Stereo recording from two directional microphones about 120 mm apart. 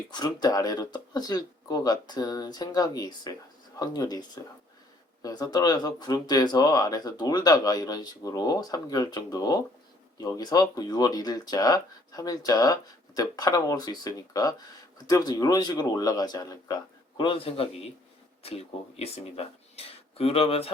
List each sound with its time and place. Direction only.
0.1 s speech: 35° left (ahead or behind)
17.2 s a man's voice: 45° left (ahead or behind)